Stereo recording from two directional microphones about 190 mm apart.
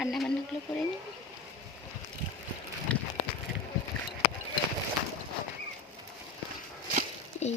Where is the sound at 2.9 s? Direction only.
5° left (ahead or behind).